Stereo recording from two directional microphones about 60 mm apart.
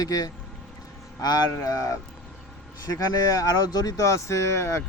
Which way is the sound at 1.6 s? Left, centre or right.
Left.